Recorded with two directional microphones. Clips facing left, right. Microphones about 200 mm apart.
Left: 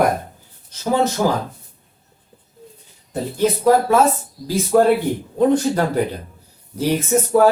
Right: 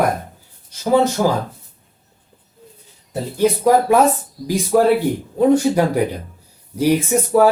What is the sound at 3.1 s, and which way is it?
Speech, 15° right (ahead or behind).